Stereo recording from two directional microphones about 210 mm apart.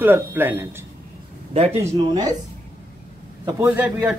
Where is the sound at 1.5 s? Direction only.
30° right (ahead or behind).